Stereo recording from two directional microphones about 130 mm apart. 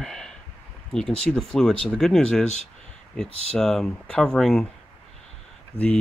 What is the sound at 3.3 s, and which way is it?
Speech, 50° right (ahead or behind).